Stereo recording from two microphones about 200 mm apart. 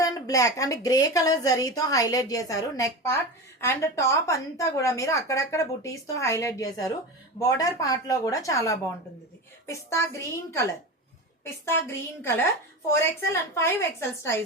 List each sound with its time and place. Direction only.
0.0 s a woman's voice: 15° left (ahead or behind)